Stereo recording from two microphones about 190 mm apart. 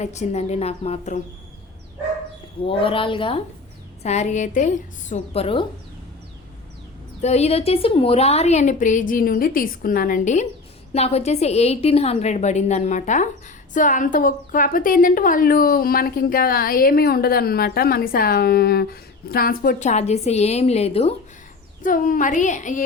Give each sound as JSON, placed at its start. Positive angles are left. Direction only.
{"t": 0.0, "sound": "a woman's voice", "side_deg": 35}
{"t": 2.6, "sound": "a woman's voice", "side_deg": 30}
{"t": 7.2, "sound": "a woman's voice", "side_deg": 35}
{"t": 21.8, "sound": "a woman's voice", "side_deg": 45}